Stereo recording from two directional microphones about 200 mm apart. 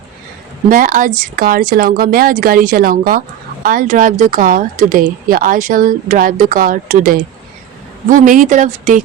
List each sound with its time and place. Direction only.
0.7 s speech: 40° right (ahead or behind)